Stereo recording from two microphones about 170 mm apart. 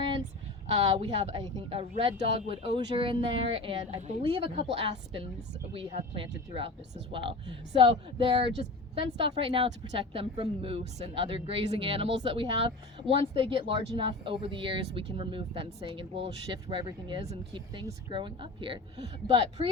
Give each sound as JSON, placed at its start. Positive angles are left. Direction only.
{"t": 0.9, "sound": "a woman's voice", "side_deg": -30}
{"t": 5.7, "sound": "a woman's voice", "side_deg": -30}